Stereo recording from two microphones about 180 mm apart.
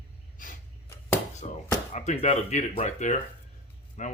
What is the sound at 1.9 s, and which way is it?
Speech, 35° left (ahead or behind).